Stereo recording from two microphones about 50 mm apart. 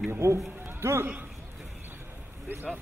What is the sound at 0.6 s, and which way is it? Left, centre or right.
Music, right.